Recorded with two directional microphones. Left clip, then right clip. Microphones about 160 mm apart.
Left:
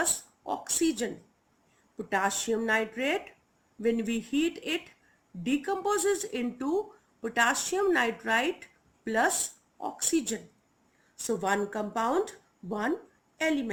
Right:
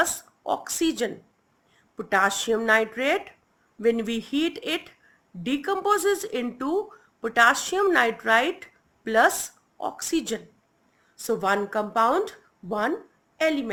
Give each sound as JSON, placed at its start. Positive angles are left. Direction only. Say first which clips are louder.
{"t": 0.0, "sound": "a woman's voice", "louder": "right 6 dB", "side_deg": -30}